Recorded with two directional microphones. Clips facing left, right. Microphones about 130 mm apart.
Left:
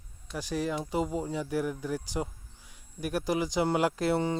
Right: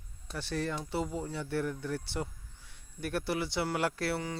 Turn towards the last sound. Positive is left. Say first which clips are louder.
# left 6 dB
turn(degrees=25)  # may be behind; listen again after turning